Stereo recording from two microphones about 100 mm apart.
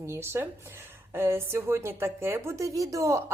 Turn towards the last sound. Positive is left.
turn(degrees=-30)  # may be behind; listen again after turning